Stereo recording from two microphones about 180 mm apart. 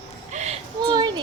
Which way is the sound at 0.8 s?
25° right (ahead or behind).